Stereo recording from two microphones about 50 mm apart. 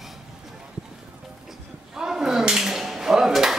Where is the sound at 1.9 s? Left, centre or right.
Centre.